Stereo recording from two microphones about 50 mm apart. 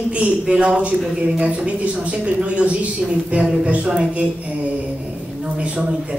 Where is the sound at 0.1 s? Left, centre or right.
Right.